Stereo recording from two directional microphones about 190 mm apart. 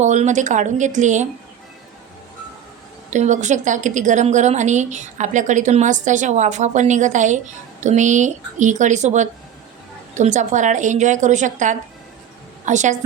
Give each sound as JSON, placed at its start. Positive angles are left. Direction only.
{"t": 0.0, "sound": "a woman's voice", "side_deg": -40}
{"t": 3.1, "sound": "a woman's voice", "side_deg": -40}